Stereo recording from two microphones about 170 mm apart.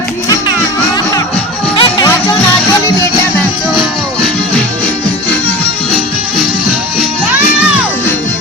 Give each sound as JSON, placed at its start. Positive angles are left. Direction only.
{"t": 1.7, "sound": "music", "side_deg": 30}